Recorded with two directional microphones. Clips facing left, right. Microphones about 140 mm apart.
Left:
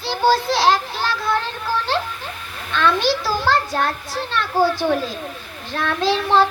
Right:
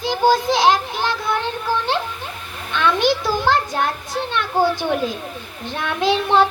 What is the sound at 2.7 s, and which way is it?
A child's voice, 15° right (ahead or behind).